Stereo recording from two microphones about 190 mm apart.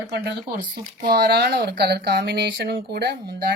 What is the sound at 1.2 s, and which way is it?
Speech, 55° right (ahead or behind).